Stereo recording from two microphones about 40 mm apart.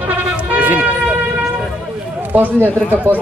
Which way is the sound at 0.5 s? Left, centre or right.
Right.